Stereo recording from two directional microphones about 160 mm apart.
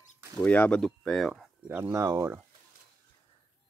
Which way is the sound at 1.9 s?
20° right (ahead or behind).